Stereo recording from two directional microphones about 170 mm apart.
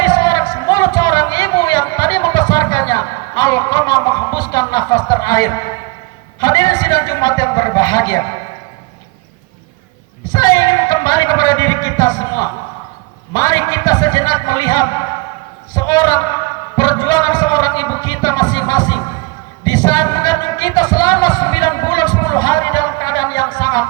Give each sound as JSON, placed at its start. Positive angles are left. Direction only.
{"t": 0.0, "sound": "a sound", "side_deg": 20}
{"t": 6.4, "sound": "speech", "side_deg": 20}
{"t": 10.3, "sound": "speech", "side_deg": 20}